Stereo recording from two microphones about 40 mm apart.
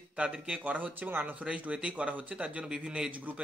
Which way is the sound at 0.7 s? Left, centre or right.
Right.